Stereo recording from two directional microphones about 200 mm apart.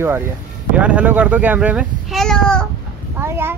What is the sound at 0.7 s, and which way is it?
A child's voice, 5° right (ahead or behind).